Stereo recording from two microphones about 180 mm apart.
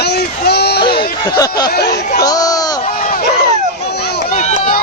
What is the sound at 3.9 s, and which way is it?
Run, 65° left (ahead or behind).